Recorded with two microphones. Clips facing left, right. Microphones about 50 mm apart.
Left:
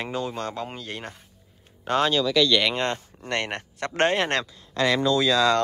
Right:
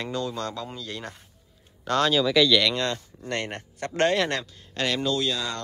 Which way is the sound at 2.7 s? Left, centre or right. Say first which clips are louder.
Left 1 dB; left.